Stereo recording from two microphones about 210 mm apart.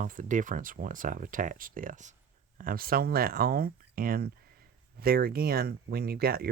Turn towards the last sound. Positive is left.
turn(degrees=-45)  # may be behind; listen again after turning